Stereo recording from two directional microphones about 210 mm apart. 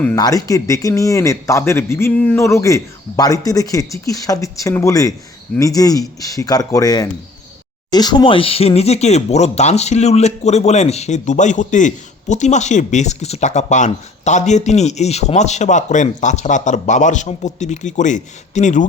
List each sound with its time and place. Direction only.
0.2 s speech: 15° left (ahead or behind); by 18.9 s 35° left (ahead or behind)